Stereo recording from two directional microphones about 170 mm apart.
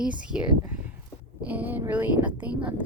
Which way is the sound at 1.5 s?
10° right (ahead or behind).